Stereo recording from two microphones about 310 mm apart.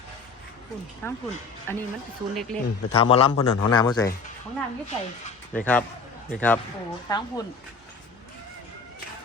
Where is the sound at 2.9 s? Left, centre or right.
Centre.